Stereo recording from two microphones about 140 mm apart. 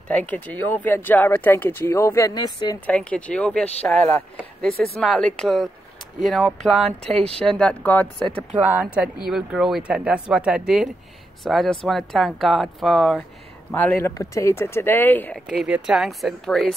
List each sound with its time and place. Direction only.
0.1 s speech: 10° left (ahead or behind); by 2.8 s 30° left (ahead or behind)
2.9 s speech: 10° left (ahead or behind)
8.7 s speech: 10° right (ahead or behind)
13.7 s speech: 10° left (ahead or behind)
15.3 s speech: centre (ahead or behind)